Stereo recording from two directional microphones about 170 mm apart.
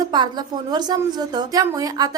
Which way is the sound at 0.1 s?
25° right (ahead or behind).